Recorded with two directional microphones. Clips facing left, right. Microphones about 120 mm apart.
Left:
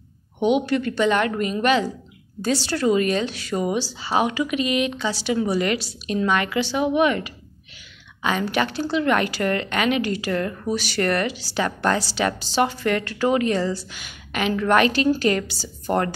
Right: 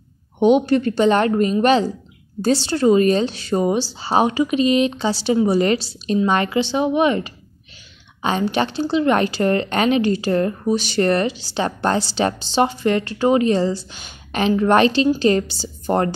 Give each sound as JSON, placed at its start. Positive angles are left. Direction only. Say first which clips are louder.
{"t": 0.4, "sound": "a woman's voice", "louder": "right 5 dB", "side_deg": -35}